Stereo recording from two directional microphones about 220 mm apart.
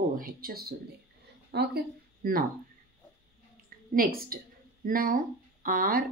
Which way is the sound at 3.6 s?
40° right (ahead or behind).